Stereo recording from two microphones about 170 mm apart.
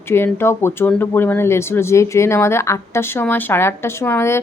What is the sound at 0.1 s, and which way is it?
Speech, 15° left (ahead or behind).